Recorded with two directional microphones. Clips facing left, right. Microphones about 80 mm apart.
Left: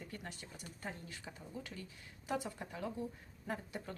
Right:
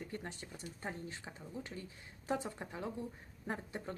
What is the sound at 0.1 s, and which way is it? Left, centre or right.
Speech, right.